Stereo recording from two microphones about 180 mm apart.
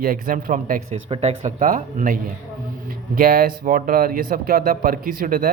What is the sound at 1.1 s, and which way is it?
Speech, 35° right (ahead or behind).